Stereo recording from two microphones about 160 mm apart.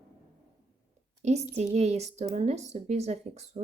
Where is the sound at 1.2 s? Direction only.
40° right (ahead or behind).